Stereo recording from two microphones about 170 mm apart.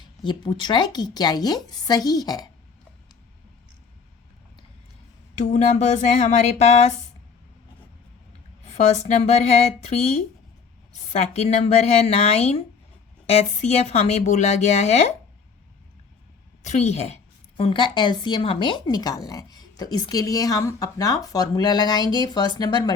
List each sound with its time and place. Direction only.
0.2 s a woman's voice: 25° left (ahead or behind)
5.3 s a woman's voice: 40° left (ahead or behind)
8.7 s a woman's voice: 40° left (ahead or behind)
11.1 s a woman's voice: 40° left (ahead or behind)
16.6 s a woman's voice: 40° left (ahead or behind)
17.6 s a woman's voice: 30° left (ahead or behind)